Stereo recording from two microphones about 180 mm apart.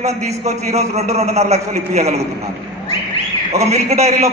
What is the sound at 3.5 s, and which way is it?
Speech, 35° right (ahead or behind).